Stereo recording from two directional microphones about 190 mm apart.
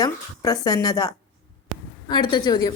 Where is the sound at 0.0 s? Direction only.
20° left (ahead or behind).